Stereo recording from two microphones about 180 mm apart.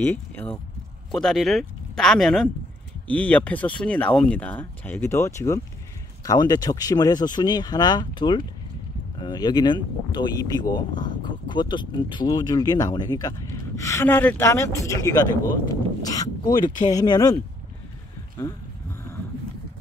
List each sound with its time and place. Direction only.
0.0 s speech: 10° left (ahead or behind)